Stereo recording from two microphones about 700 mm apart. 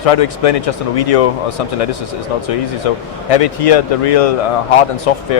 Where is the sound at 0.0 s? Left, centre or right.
Left.